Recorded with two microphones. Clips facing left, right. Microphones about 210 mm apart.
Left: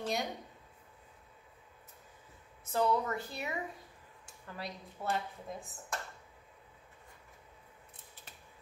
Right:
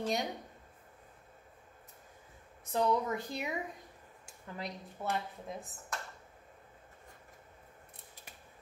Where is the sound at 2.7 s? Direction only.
15° right (ahead or behind).